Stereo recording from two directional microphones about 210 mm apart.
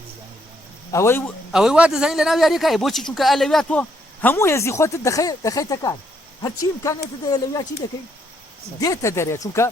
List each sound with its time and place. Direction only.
0.9 s a man's voice: 15° left (ahead or behind)
1.5 s a man's voice: 5° right (ahead or behind); by 9.6 s 15° left (ahead or behind)